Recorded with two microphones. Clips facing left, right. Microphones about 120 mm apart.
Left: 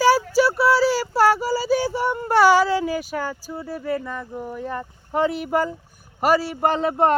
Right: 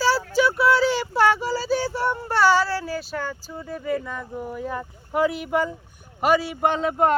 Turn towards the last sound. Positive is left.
turn(degrees=40)  # may be behind; listen again after turning